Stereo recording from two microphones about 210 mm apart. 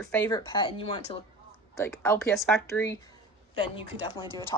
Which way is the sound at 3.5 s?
25° left (ahead or behind).